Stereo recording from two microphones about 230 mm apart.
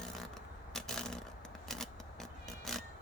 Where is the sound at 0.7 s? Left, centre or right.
Centre.